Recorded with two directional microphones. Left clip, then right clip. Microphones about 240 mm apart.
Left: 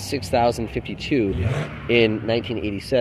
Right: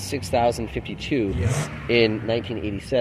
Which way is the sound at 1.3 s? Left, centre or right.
Left.